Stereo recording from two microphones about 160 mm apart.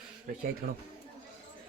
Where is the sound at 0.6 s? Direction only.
60° right (ahead or behind).